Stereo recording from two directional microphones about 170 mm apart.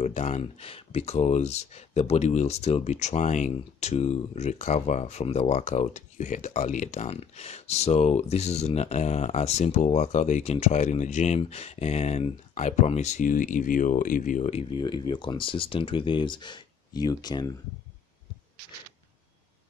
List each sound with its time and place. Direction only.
0.0 s speech: 40° left (ahead or behind); by 17.6 s 25° left (ahead or behind)